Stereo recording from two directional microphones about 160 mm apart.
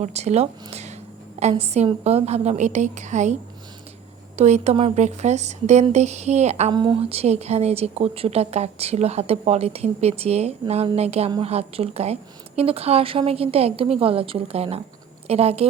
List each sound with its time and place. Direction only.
0.0 s a woman's voice: 45° right (ahead or behind)
4.4 s a woman's voice: 45° right (ahead or behind)
6.7 s speech: 30° right (ahead or behind)